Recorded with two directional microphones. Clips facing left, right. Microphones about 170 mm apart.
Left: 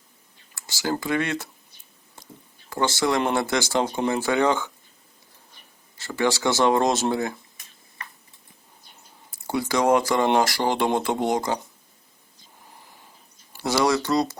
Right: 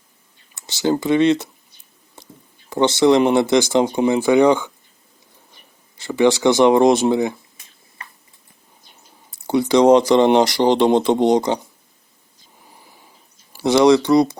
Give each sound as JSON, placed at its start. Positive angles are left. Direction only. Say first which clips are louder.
{"t": 0.5, "sound": "speech", "louder": "right 8 dB", "side_deg": -20}
{"t": 2.6, "sound": "speech", "louder": "right 9 dB", "side_deg": -20}
{"t": 6.0, "sound": "speech", "louder": "right 8 dB", "side_deg": -15}
{"t": 9.4, "sound": "speech", "louder": "right 9 dB", "side_deg": -20}
{"t": 13.8, "sound": "speech", "louder": "right 9 dB", "side_deg": -15}